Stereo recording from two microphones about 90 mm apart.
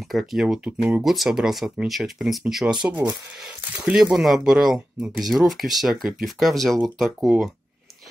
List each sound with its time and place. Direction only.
0.1 s speech: centre (ahead or behind)
0.7 s speech: 15° right (ahead or behind)
1.0 s speech: centre (ahead or behind)